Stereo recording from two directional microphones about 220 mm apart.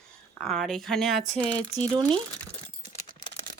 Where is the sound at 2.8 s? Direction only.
35° left (ahead or behind).